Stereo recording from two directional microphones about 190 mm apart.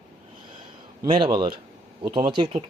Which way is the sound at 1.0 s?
25° right (ahead or behind).